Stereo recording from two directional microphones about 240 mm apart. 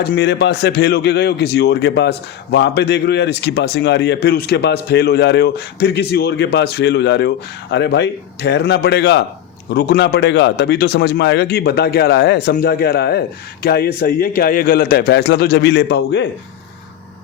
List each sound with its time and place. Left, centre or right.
0.0 s a man's voice: left